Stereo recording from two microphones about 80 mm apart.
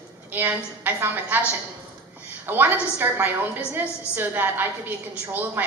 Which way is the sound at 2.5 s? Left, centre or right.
Right.